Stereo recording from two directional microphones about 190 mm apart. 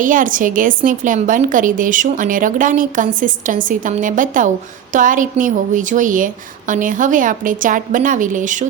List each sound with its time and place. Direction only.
0.0 s a woman's voice: 45° right (ahead or behind)